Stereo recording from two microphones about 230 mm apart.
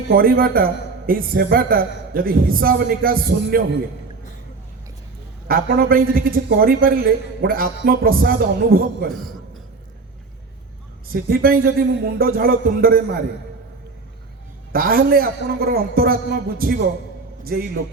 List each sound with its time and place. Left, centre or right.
0.1 s a man's voice: right
5.5 s a man's voice: right
9.1 s a man's voice: centre
11.1 s a man's voice: right
14.7 s a man's voice: right